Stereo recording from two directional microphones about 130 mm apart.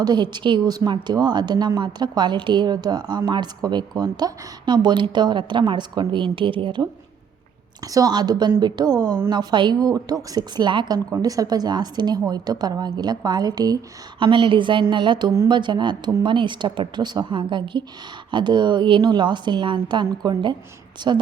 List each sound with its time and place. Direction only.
0.0 s a woman's voice: 35° right (ahead or behind)
7.9 s a woman's voice: 30° right (ahead or behind)